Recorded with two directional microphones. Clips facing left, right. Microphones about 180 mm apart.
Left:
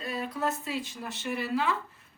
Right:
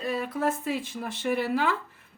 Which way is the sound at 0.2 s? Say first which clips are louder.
Right 4 dB; 50° right (ahead or behind).